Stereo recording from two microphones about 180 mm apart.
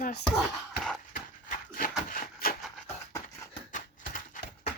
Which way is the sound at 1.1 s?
50° left (ahead or behind).